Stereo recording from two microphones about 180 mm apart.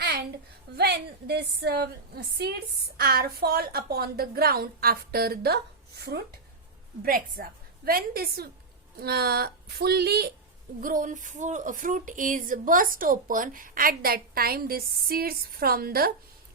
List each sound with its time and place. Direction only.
0.0 s a sound: 65° right (ahead or behind)
0.8 s a woman's voice: 65° right (ahead or behind)
10.8 s speech: 50° right (ahead or behind)